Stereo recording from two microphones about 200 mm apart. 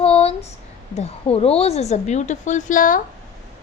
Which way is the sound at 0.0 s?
30° left (ahead or behind).